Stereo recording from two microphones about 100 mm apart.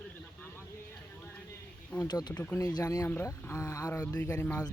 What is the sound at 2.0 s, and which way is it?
Speech, 45° left (ahead or behind).